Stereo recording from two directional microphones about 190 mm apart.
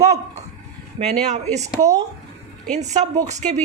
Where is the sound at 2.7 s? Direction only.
35° right (ahead or behind).